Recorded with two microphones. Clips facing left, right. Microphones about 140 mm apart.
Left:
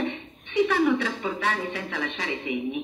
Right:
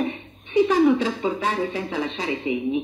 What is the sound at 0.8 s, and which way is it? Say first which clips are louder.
Speech: right 5 dB; 25° right (ahead or behind).